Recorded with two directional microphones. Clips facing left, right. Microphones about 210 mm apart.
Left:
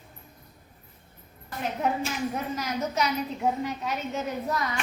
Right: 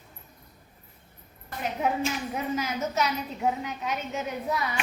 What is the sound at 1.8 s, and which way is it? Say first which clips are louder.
A woman's voice: even; 5° right (ahead or behind).